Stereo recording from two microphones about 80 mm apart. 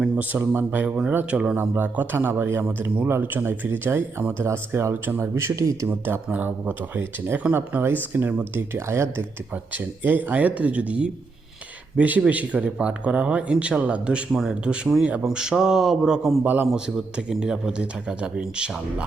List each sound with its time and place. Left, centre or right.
0.2 s speech: right
1.5 s speech: right
6.2 s speech: right
9.7 s speech: right